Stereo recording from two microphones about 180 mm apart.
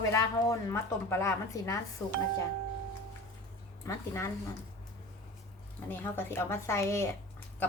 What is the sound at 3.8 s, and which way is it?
Speech, 15° left (ahead or behind).